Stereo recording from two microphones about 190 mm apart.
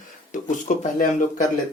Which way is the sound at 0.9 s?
45° left (ahead or behind).